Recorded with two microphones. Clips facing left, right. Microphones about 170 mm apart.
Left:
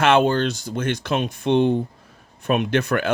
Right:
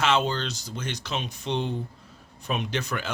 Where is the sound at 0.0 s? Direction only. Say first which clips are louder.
Left 8 dB; 55° left (ahead or behind).